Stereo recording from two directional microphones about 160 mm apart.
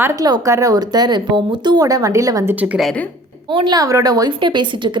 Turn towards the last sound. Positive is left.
turn(degrees=-30)  # may be behind; listen again after turning